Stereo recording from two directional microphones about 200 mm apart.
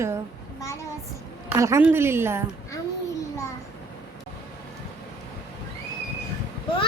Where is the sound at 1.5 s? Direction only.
15° right (ahead or behind).